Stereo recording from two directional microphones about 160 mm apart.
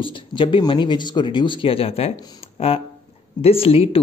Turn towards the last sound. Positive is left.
turn(degrees=35)  # may be behind; listen again after turning